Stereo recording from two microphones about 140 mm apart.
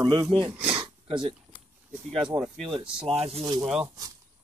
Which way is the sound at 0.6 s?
10° right (ahead or behind).